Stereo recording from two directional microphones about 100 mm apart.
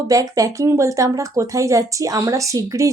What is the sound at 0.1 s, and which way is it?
Speech, 35° right (ahead or behind).